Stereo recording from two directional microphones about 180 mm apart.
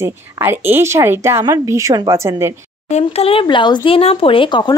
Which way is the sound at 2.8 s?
35° left (ahead or behind).